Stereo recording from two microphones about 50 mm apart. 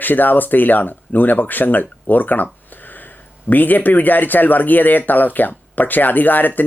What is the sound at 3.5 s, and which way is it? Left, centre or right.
Speech, left.